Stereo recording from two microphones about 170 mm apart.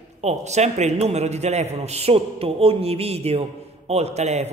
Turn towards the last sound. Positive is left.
turn(degrees=-40)  # may be behind; listen again after turning